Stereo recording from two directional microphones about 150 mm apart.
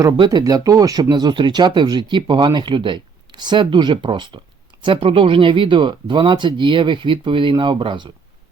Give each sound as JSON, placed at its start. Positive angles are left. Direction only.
{"t": 0.0, "sound": "speech", "side_deg": -25}